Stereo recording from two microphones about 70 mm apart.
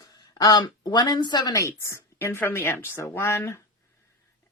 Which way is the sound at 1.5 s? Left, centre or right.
Left.